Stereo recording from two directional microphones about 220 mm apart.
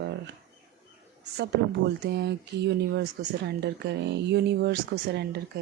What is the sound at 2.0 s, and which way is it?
Speech, 50° right (ahead or behind).